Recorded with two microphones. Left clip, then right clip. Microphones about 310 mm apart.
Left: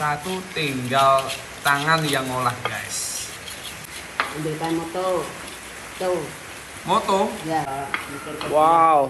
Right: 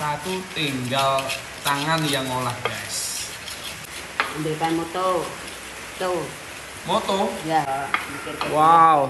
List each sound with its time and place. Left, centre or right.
0.0 s speech: centre
8.5 s stir: right